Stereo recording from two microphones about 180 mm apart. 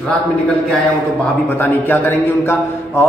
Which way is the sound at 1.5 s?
10° left (ahead or behind).